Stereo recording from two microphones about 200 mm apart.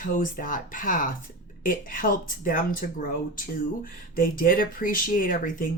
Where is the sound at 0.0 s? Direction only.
40° left (ahead or behind).